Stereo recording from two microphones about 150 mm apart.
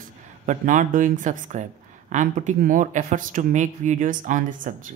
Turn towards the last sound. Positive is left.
turn(degrees=-60)  # may be behind; listen again after turning